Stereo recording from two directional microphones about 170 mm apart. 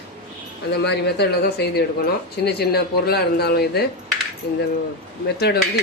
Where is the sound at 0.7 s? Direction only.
75° left (ahead or behind).